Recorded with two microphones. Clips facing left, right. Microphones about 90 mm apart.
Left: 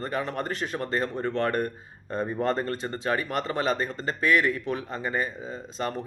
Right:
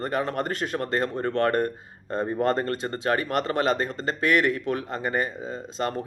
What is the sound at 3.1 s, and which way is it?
Speech, 55° right (ahead or behind).